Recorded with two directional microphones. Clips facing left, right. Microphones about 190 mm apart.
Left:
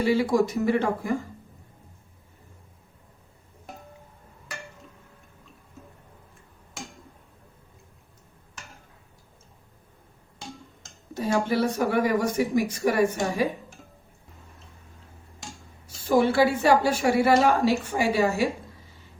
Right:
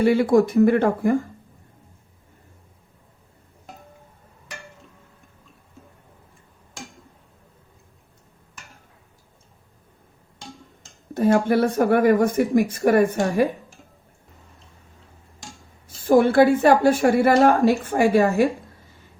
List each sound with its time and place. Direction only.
0.0 s speech: 55° right (ahead or behind)
11.1 s a woman's voice: 55° right (ahead or behind)
16.0 s a woman's voice: 50° right (ahead or behind)